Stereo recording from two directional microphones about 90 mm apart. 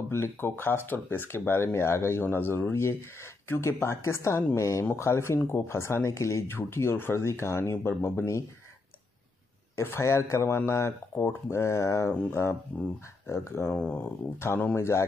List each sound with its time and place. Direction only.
0.1 s speech: 25° left (ahead or behind)
9.8 s speech: 30° left (ahead or behind)
13.7 s speech: 15° left (ahead or behind)